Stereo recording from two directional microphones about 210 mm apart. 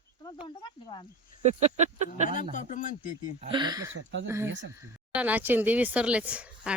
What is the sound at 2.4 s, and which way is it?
Speech, 35° left (ahead or behind).